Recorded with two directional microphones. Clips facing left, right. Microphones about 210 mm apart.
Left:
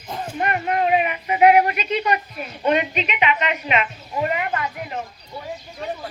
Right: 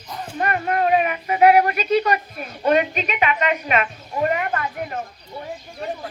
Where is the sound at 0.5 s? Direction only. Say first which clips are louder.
Right 1 dB; 40° right (ahead or behind).